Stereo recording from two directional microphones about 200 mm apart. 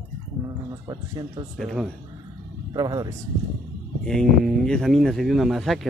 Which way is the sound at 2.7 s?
20° right (ahead or behind).